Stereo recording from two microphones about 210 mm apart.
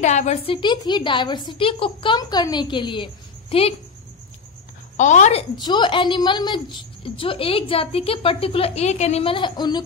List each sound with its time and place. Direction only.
0.0 s a woman's voice: 35° left (ahead or behind)
4.9 s a woman's voice: 35° left (ahead or behind)
5.6 s a woman's voice: 20° left (ahead or behind)